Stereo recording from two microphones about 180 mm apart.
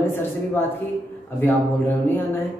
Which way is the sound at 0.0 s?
10° left (ahead or behind).